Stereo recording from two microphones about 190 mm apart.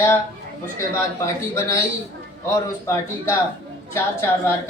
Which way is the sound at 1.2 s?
15° left (ahead or behind).